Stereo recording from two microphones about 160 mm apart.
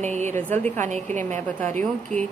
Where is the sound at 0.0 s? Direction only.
45° right (ahead or behind).